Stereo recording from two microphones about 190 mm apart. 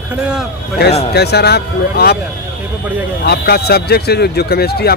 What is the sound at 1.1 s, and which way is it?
Speech, 60° left (ahead or behind).